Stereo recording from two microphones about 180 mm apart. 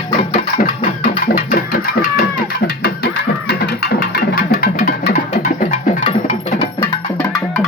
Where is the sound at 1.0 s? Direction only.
50° left (ahead or behind).